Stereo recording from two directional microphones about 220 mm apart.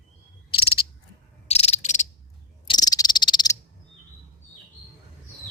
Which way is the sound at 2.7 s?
15° left (ahead or behind).